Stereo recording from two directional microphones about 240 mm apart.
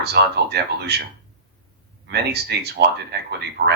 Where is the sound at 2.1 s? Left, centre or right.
Right.